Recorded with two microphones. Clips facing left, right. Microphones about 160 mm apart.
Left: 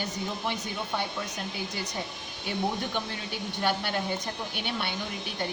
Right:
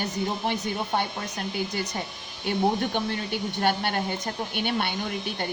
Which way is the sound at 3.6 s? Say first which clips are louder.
Right 3 dB; 60° right (ahead or behind).